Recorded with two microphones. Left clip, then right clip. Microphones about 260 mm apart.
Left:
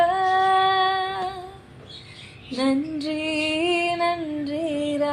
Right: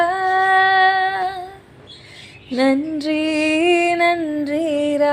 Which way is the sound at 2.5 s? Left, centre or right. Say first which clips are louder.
Right 7 dB; right.